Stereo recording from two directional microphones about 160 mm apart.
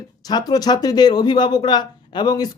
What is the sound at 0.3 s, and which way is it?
Speech, 25° left (ahead or behind).